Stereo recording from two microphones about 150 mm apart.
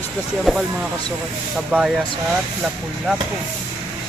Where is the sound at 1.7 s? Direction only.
10° right (ahead or behind).